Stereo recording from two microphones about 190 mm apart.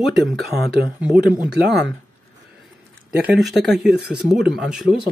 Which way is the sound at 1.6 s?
60° right (ahead or behind).